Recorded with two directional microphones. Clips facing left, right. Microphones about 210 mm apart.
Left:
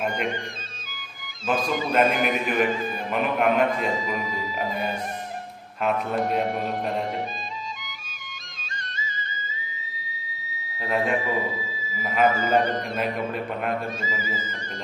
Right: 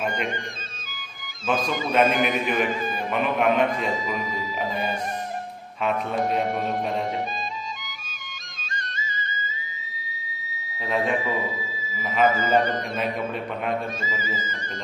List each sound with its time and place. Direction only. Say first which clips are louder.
1.5 s a man's voice: even; centre (ahead or behind)
8.7 s music: right 2 dB; 45° right (ahead or behind)
10.8 s a sound: even; 5° left (ahead or behind)
11.9 s a man's voice: even; 5° left (ahead or behind)